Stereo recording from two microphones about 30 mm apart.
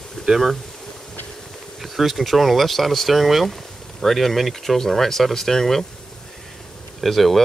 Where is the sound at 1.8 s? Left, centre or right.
Centre.